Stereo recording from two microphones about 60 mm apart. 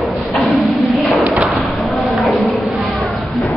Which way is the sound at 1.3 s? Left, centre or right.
Right.